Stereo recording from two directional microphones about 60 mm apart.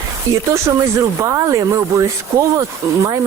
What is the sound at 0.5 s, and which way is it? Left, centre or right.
Speech, right.